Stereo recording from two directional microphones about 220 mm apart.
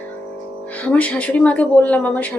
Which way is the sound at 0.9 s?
5° left (ahead or behind).